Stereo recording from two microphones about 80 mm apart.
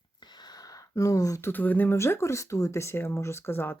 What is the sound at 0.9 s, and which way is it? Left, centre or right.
Speech, left.